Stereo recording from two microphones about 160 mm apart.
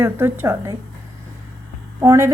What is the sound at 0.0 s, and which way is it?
Speech, 15° right (ahead or behind).